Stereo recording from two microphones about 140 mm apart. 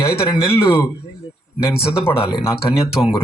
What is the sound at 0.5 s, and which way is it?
Speech, 20° left (ahead or behind).